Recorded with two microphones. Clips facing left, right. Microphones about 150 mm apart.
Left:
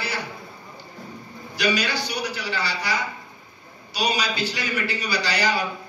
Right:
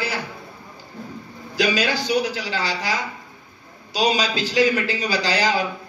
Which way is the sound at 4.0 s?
90° right.